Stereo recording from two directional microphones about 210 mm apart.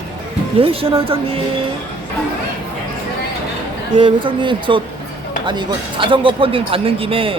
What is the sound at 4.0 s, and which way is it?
Speech, 25° right (ahead or behind).